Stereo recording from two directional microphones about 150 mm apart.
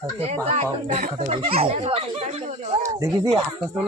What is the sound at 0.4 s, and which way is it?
Speech, 45° right (ahead or behind).